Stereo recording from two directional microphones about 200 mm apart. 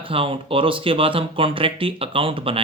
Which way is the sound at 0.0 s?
25° right (ahead or behind).